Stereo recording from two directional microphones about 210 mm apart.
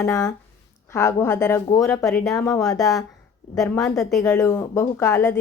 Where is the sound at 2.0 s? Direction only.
Centre (ahead or behind).